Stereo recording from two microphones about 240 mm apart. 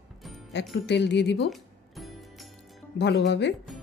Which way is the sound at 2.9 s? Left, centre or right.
Left.